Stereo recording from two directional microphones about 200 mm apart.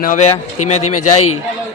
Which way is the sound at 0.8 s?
90° left.